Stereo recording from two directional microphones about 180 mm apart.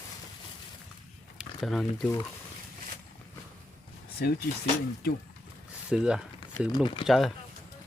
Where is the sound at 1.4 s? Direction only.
Centre (ahead or behind).